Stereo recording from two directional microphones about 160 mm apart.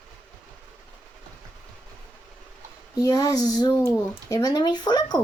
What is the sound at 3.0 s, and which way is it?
Speech, 20° left (ahead or behind).